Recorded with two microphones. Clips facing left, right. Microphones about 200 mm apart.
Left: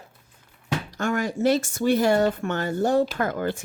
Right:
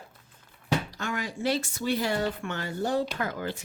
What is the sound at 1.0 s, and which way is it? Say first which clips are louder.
Speech: left 8 dB; 45° left (ahead or behind).